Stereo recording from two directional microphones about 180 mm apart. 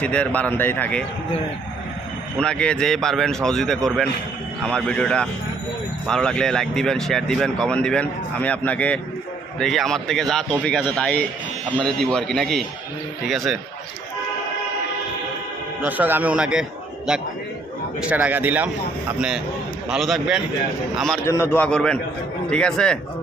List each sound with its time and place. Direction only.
0.0 s a man's voice: 5° left (ahead or behind)
2.4 s speech: 5° left (ahead or behind)
15.8 s speech: 10° right (ahead or behind)
18.0 s speech: 10° right (ahead or behind)
21.2 s a man's voice: 15° left (ahead or behind)